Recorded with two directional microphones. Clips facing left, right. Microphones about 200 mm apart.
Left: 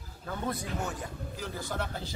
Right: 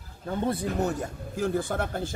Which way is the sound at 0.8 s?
40° right (ahead or behind).